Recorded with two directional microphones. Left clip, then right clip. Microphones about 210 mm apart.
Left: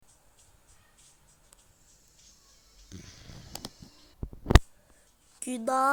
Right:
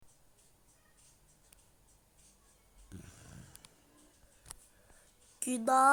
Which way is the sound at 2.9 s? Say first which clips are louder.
Left 6 dB; 5° right (ahead or behind).